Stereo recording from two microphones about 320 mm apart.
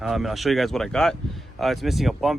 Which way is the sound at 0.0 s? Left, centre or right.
Centre.